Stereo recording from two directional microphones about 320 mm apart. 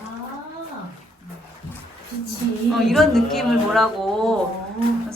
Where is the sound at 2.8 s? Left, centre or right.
Centre.